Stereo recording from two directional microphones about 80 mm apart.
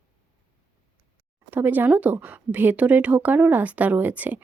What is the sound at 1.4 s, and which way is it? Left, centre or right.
A woman's voice, right.